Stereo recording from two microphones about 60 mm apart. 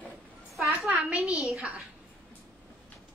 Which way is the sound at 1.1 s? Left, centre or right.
Left.